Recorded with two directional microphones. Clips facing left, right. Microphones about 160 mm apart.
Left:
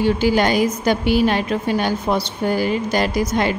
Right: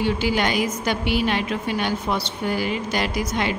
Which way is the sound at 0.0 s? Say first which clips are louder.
Left 5 dB; 40° left (ahead or behind).